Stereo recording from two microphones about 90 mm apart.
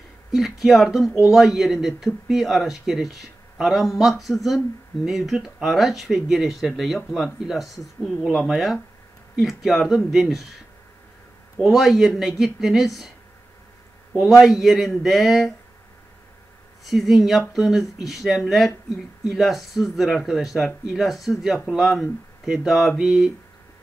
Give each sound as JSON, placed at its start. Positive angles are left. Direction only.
{"t": 0.3, "sound": "speech", "side_deg": 0}
{"t": 11.6, "sound": "speech", "side_deg": 0}
{"t": 14.2, "sound": "speech", "side_deg": -5}
{"t": 16.8, "sound": "speech", "side_deg": 0}